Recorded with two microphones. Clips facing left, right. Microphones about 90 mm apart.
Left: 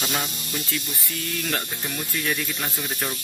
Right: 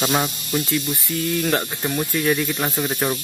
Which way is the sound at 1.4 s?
30° right (ahead or behind).